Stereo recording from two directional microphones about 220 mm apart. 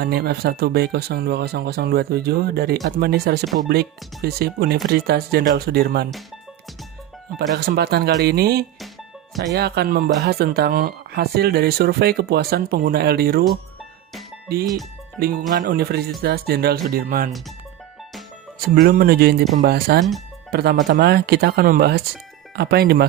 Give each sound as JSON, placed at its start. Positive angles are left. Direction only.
{"t": 0.0, "sound": "speech", "side_deg": -45}
{"t": 7.5, "sound": "speech", "side_deg": -45}
{"t": 14.1, "sound": "music", "side_deg": 0}
{"t": 15.2, "sound": "speech", "side_deg": -45}
{"t": 18.7, "sound": "speech", "side_deg": -40}